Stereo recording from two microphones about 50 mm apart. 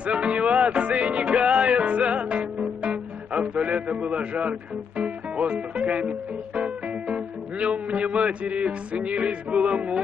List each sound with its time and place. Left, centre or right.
0.0 s music: right